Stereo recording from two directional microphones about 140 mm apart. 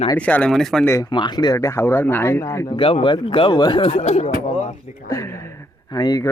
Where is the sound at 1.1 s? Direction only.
35° left (ahead or behind).